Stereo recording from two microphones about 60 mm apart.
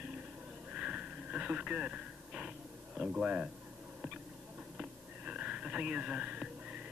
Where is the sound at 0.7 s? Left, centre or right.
Right.